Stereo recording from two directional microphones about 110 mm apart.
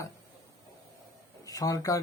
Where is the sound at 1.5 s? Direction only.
35° left (ahead or behind).